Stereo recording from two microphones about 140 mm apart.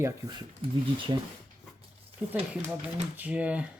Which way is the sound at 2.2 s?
10° right (ahead or behind).